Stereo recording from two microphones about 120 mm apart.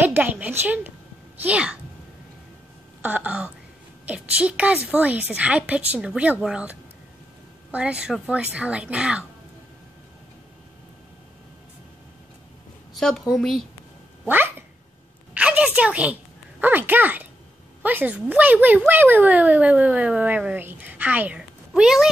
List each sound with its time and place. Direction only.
0.0 s speech: 15° right (ahead or behind)
3.0 s speech: 10° right (ahead or behind)
12.9 s a woman's voice: centre (ahead or behind)
14.2 s cat: 15° right (ahead or behind)
15.3 s a woman's voice: 10° right (ahead or behind)